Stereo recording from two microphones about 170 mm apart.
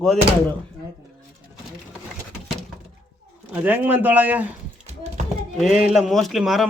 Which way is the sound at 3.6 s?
10° right (ahead or behind).